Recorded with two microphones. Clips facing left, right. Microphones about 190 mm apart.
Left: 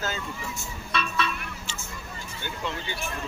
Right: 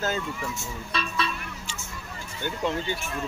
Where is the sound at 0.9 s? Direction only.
35° right (ahead or behind).